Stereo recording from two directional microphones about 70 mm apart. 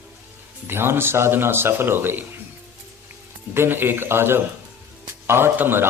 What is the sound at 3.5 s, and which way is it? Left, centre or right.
Speech, right.